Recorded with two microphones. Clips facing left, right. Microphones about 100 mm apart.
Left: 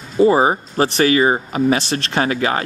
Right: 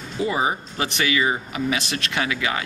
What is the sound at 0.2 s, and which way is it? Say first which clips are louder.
Speech: left 10 dB; 40° left (ahead or behind).